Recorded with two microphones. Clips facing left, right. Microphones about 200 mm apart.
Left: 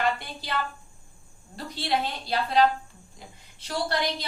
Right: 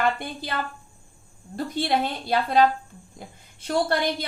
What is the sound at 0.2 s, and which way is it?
A woman's voice, 50° right (ahead or behind).